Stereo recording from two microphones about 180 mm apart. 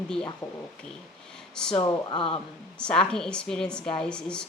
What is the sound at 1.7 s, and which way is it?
Speech, 25° left (ahead or behind).